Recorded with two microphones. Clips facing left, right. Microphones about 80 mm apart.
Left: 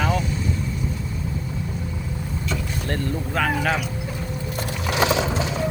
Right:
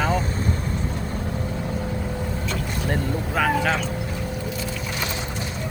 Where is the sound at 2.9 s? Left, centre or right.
Centre.